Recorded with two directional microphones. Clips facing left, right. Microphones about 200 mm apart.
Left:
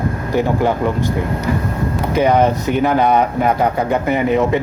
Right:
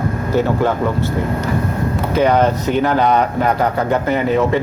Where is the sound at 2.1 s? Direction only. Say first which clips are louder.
Even; 10° left (ahead or behind).